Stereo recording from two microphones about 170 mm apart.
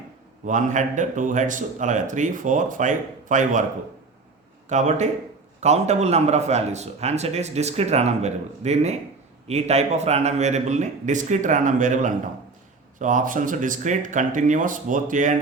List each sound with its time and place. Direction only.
0.4 s a man's voice: 45° right (ahead or behind)
4.7 s a man's voice: 45° right (ahead or behind)